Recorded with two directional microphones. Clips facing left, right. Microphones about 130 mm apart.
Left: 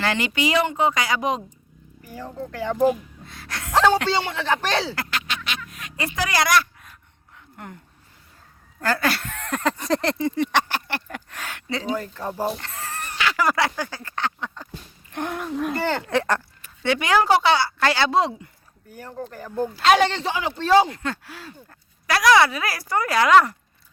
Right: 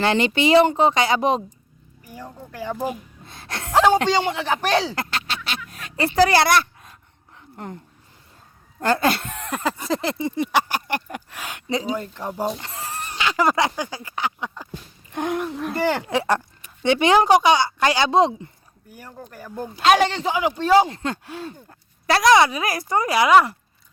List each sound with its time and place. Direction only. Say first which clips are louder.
0.0 s speech: right 4 dB; 25° right (ahead or behind)
2.0 s speech: left 5 dB; 10° right (ahead or behind)
3.2 s gasp: right 2 dB; 25° right (ahead or behind)
3.8 s speech: right 2 dB; 15° right (ahead or behind)
5.1 s a sound: right 1 dB; 30° right (ahead or behind)
7.5 s speech: right 5 dB; 30° right (ahead or behind)
8.8 s speech: right 3 dB; 25° right (ahead or behind); by 10.2 s 5° right (ahead or behind)
10.2 s a sound: even; 15° right (ahead or behind)
10.8 s speech: right 4 dB; 15° right (ahead or behind)
18.9 s speech: left 5 dB; 10° right (ahead or behind)